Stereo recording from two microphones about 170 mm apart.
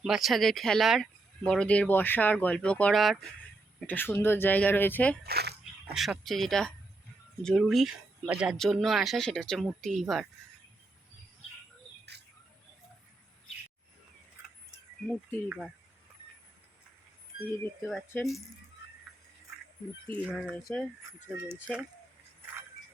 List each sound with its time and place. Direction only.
0.0 s speech: centre (ahead or behind)
5.2 s speech: 70° right (ahead or behind)
5.9 s speech: centre (ahead or behind)
15.4 s speech: 5° right (ahead or behind)
17.8 s speech: 5° left (ahead or behind)
20.2 s speech: centre (ahead or behind)